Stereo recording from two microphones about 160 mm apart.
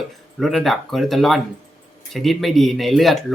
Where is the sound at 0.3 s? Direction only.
Centre (ahead or behind).